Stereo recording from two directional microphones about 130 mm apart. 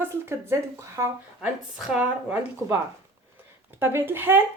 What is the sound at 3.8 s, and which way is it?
Speech, 20° right (ahead or behind).